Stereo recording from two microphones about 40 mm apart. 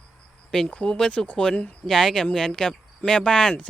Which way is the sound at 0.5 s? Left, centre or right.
Left.